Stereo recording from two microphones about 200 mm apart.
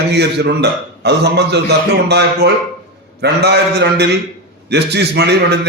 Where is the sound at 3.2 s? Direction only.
55° right (ahead or behind).